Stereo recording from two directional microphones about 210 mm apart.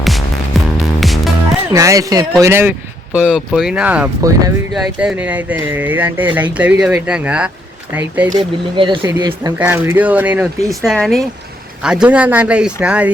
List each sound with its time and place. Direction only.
0.9 s music: centre (ahead or behind)
1.7 s speech: 15° right (ahead or behind)
8.7 s speech: 25° right (ahead or behind); by 13.1 s 5° right (ahead or behind)